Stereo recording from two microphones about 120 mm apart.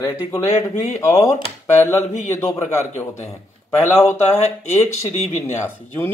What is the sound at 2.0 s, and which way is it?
Speech, 70° left (ahead or behind).